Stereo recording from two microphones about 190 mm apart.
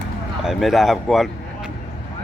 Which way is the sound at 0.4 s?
Centre (ahead or behind).